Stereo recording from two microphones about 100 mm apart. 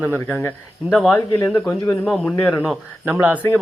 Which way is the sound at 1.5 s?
15° left (ahead or behind).